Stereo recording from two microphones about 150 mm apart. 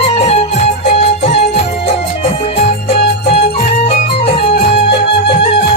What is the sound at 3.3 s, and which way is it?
Music, 40° left (ahead or behind).